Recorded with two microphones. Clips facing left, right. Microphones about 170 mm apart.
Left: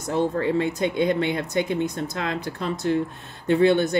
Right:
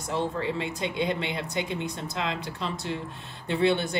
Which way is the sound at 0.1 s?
50° left (ahead or behind).